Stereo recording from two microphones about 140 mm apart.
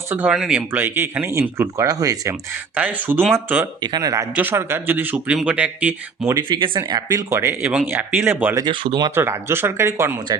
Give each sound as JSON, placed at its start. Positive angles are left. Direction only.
{"t": 0.1, "sound": "speech", "side_deg": -10}
{"t": 2.7, "sound": "speech", "side_deg": -10}
{"t": 3.8, "sound": "speech", "side_deg": -30}
{"t": 4.4, "sound": "speech", "side_deg": -15}
{"t": 6.3, "sound": "speech", "side_deg": -35}
{"t": 8.5, "sound": "speech", "side_deg": -35}
{"t": 9.1, "sound": "speech", "side_deg": -15}